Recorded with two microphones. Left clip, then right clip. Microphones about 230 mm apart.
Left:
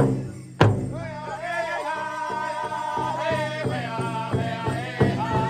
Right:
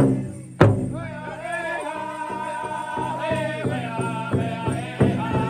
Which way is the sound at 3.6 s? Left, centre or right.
Left.